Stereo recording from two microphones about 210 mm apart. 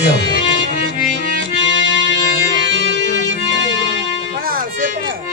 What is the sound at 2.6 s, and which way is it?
Music, 60° right (ahead or behind).